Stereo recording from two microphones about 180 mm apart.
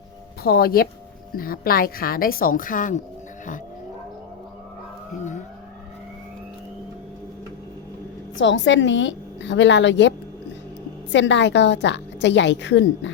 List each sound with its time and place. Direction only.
0.4 s a woman's voice: 60° left (ahead or behind)
8.4 s a woman's voice: 90° left